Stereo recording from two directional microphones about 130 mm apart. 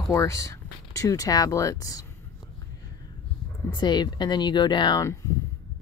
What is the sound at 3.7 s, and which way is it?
Speech, 35° left (ahead or behind).